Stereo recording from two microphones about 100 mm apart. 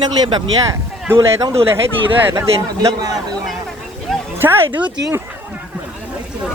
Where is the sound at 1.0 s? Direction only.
25° right (ahead or behind).